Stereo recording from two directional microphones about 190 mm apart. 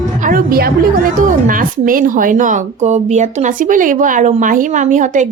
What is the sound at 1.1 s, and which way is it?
Speech, 45° right (ahead or behind).